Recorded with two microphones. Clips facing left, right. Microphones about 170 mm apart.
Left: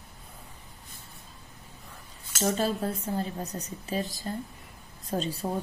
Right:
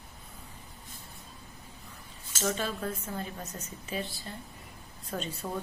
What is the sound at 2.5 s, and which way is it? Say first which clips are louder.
A woman's voice: left 6 dB; 35° left (ahead or behind).